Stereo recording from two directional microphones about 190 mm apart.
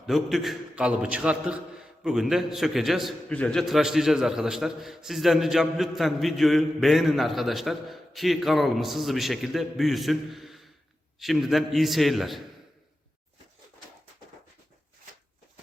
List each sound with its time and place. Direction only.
0.0 s a man's voice: centre (ahead or behind)